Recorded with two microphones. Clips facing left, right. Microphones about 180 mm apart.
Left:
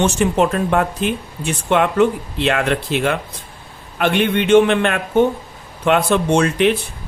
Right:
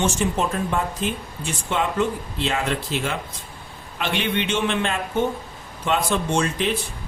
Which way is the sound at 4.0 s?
55° left (ahead or behind).